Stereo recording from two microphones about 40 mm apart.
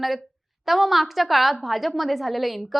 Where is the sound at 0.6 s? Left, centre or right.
Centre.